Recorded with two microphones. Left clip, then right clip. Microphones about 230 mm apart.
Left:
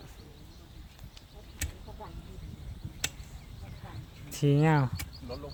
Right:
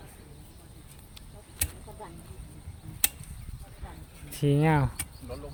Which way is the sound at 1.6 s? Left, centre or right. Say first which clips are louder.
Right 3 dB; right.